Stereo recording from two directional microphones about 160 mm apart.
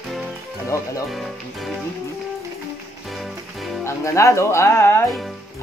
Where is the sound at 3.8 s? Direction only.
20° left (ahead or behind).